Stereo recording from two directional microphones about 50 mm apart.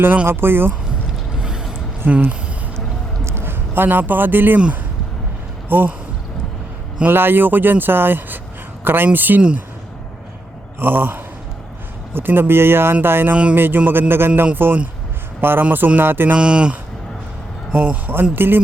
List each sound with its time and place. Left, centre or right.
0.3 s speech: right
1.4 s mechanisms: centre
2.0 s speech: right
3.2 s speech: right
5.6 s speech: right
7.1 s a man's voice: right
10.8 s a man's voice: right
13.3 s speech: right
13.6 s a man's voice: right
16.4 s speech: centre
17.7 s speech: right